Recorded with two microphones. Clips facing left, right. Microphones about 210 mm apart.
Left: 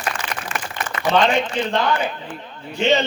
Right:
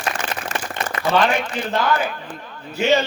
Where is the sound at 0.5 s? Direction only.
40° right (ahead or behind).